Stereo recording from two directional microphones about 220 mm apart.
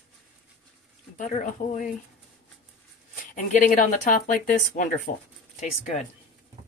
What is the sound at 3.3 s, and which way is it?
Speech, 35° left (ahead or behind).